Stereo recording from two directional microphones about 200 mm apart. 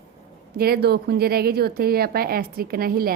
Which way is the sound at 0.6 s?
50° right (ahead or behind).